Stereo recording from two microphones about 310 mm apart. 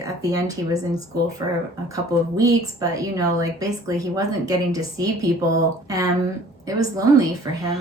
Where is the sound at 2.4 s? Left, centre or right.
Centre.